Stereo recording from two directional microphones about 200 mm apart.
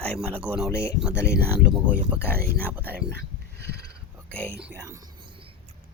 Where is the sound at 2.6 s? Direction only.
10° right (ahead or behind).